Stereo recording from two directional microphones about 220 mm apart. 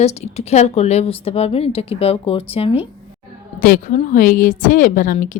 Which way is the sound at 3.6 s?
40° left (ahead or behind).